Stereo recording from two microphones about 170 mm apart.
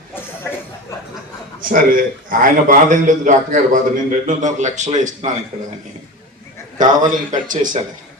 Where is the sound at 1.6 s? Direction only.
55° right (ahead or behind).